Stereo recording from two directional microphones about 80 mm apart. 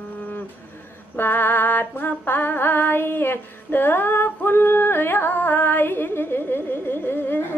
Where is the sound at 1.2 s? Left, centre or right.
Left.